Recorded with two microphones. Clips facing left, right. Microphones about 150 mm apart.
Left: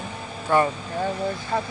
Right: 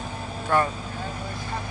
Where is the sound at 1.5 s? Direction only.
60° left (ahead or behind).